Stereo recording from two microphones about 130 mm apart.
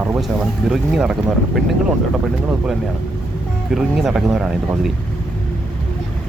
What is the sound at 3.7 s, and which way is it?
Speech, 5° right (ahead or behind).